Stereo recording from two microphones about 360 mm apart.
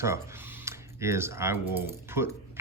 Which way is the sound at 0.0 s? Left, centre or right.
Centre.